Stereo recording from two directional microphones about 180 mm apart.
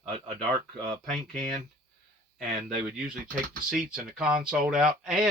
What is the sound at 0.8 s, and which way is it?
Speech, centre (ahead or behind).